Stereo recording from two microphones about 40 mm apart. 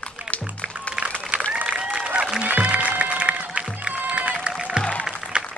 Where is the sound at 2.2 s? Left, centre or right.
Right.